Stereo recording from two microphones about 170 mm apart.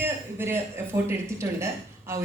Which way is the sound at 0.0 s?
15° right (ahead or behind).